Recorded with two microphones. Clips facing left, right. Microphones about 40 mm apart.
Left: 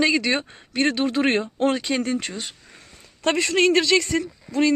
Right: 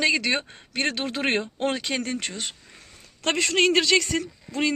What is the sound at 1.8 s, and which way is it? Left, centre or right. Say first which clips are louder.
A man's voice: left 4 dB; centre.